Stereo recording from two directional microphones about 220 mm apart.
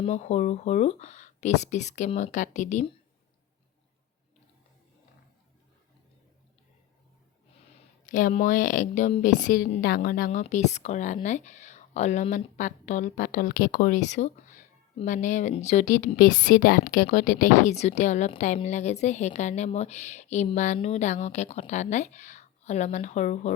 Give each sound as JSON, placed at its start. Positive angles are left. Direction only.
{"t": 0.0, "sound": "speech", "side_deg": 30}
{"t": 8.1, "sound": "speech", "side_deg": 35}